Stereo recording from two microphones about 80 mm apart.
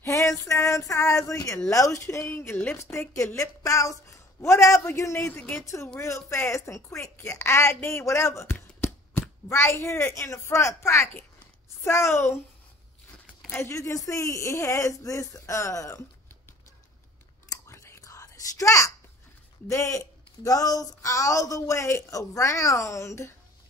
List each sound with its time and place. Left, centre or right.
0.0 s a sound: left
1.7 s speech: left
2.2 s speech: left
13.5 s speech: left
17.6 s whispering: left
19.7 s speech: left